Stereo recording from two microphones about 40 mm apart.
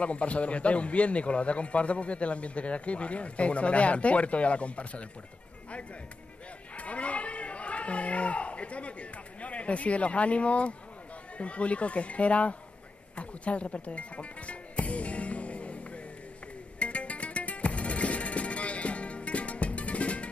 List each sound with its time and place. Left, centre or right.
0.0 s a man's voice: left
6.8 s a sound: left
9.4 s a man's voice: left
16.8 s music: left